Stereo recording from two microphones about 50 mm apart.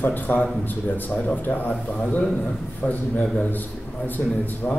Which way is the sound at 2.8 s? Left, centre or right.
Left.